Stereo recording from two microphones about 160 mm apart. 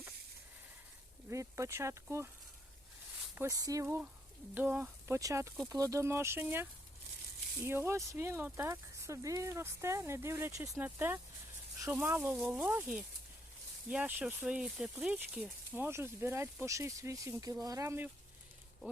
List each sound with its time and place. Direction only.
1.3 s speech: 20° right (ahead or behind)
3.3 s speech: 20° right (ahead or behind)
3.8 s speech: 10° right (ahead or behind)